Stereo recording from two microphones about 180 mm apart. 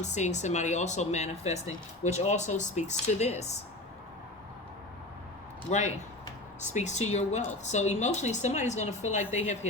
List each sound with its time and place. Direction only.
0.0 s speech: 40° left (ahead or behind)
6.7 s speech: 40° left (ahead or behind)